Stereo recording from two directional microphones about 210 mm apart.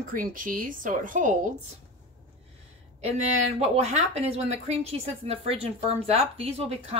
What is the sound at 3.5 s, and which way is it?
Speech, 30° right (ahead or behind).